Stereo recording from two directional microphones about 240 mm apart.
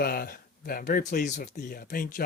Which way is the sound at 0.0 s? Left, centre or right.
Left.